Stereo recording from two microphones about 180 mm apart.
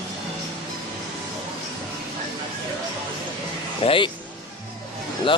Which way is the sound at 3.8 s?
30° left (ahead or behind).